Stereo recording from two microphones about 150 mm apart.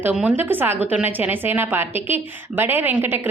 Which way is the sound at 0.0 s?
10° right (ahead or behind).